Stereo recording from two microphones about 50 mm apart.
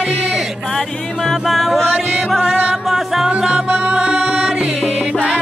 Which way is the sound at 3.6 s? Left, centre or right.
Right.